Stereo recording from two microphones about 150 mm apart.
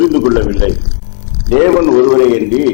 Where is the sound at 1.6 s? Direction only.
15° left (ahead or behind).